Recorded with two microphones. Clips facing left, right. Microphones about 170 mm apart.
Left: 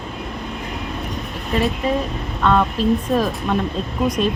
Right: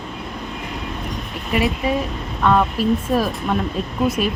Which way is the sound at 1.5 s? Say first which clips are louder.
Even; 10° right (ahead or behind).